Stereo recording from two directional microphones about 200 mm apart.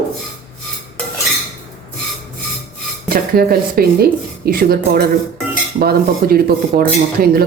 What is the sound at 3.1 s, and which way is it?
Speech, 50° right (ahead or behind).